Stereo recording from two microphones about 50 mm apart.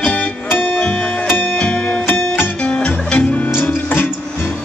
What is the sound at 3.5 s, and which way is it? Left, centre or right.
Music, left.